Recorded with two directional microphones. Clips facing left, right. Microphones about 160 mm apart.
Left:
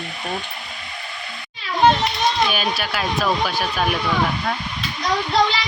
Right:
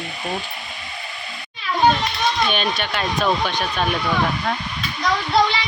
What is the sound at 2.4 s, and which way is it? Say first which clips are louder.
Speech: even; 5° left (ahead or behind).